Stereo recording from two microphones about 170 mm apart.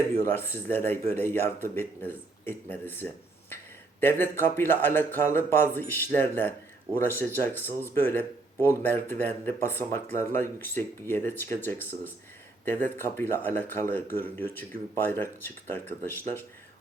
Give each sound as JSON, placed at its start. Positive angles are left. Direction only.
{"t": 0.2, "sound": "speech", "side_deg": 15}